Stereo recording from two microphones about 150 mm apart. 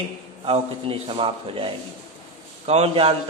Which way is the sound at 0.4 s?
40° right (ahead or behind).